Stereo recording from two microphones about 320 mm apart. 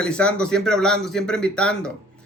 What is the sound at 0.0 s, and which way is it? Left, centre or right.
A man's voice, centre.